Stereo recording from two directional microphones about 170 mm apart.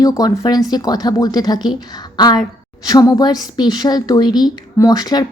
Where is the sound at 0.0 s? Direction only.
20° left (ahead or behind).